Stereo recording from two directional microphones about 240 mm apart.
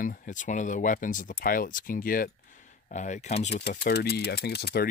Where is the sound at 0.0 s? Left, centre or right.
Left.